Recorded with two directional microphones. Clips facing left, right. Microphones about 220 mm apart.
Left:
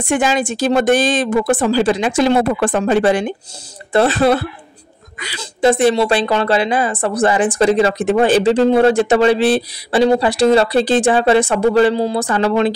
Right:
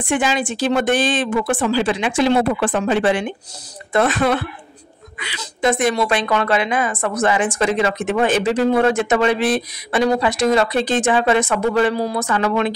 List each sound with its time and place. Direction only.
0.0 s a woman's voice: 45° left (ahead or behind)